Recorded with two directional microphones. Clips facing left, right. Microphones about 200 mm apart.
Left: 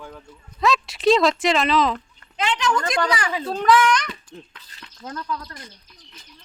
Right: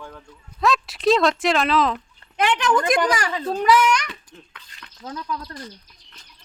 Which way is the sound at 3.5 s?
10° right (ahead or behind).